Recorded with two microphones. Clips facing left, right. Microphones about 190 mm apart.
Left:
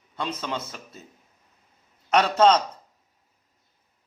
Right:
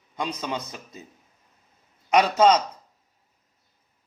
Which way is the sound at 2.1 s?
10° right (ahead or behind).